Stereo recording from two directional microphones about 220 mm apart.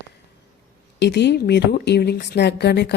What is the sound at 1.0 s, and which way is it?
A woman's voice, 50° left (ahead or behind).